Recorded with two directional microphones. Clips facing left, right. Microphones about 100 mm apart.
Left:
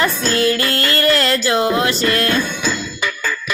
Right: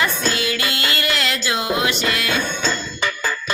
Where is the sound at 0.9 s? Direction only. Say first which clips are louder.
Left 7 dB; 40° left (ahead or behind).